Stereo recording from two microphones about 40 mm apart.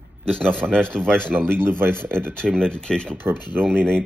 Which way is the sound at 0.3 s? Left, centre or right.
Centre.